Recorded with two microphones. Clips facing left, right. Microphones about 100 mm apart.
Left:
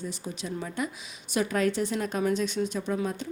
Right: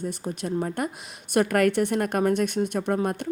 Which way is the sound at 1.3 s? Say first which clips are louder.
Right 5 dB; 60° right (ahead or behind).